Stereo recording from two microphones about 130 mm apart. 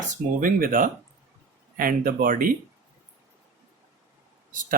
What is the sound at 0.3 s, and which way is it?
Speech, 90° right.